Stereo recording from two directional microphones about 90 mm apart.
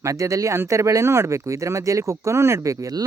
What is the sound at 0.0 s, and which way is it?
A man's voice, 35° right (ahead or behind).